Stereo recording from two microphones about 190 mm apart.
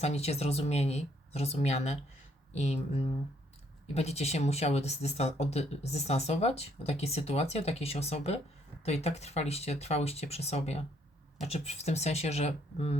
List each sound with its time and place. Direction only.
0.0 s speech: 35° left (ahead or behind)
3.9 s speech: 35° left (ahead or behind)